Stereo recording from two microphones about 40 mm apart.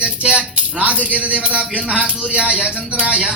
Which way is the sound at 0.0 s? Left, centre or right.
Right.